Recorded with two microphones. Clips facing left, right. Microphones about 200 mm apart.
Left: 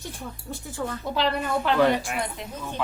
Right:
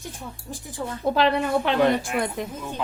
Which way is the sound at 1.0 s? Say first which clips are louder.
Right 6 dB; 70° right (ahead or behind).